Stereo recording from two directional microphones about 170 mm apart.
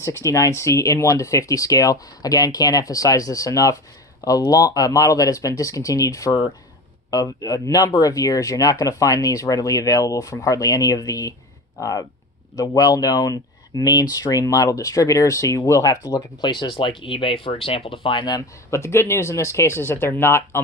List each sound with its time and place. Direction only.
0.0 s speech: 15° left (ahead or behind)